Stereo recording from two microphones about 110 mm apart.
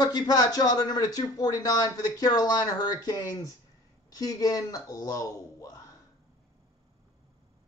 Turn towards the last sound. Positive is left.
turn(degrees=30)  # may be behind; listen again after turning